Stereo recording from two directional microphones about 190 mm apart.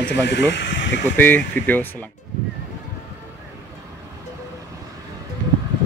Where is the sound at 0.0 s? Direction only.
65° left (ahead or behind).